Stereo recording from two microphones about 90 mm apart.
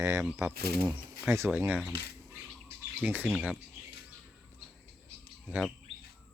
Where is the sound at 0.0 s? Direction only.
35° right (ahead or behind).